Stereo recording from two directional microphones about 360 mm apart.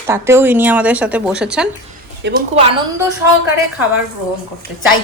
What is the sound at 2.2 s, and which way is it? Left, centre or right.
Speech, right.